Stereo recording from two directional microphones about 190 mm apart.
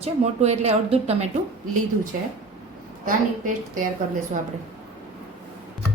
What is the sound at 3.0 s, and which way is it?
Speech, 45° right (ahead or behind).